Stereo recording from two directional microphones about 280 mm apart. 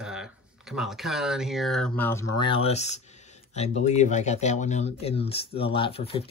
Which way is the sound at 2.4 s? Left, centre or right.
Centre.